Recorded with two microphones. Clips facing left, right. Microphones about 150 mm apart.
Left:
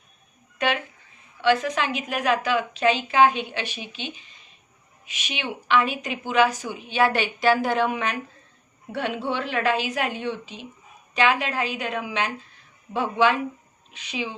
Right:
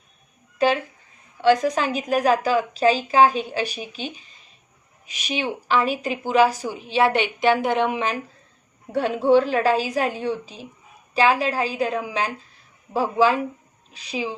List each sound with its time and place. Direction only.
0.6 s a woman's voice: 30° right (ahead or behind)
8.9 s a woman's voice: 40° right (ahead or behind)